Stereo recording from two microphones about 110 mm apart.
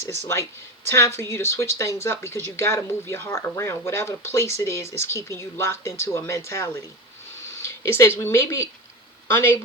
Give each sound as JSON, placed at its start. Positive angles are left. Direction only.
{"t": 0.0, "sound": "speech", "side_deg": 25}